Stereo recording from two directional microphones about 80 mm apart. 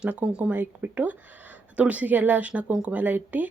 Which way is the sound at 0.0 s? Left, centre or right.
Centre.